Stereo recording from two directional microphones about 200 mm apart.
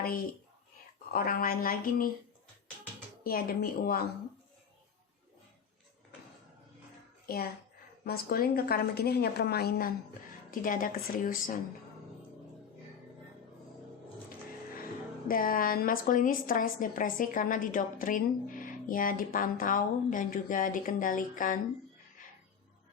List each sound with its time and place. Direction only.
1.1 s a woman's voice: 45° left (ahead or behind)
3.2 s a woman's voice: 50° left (ahead or behind)
7.3 s a woman's voice: 50° left (ahead or behind)
15.3 s a woman's voice: 45° left (ahead or behind)
22.2 s music: 40° left (ahead or behind)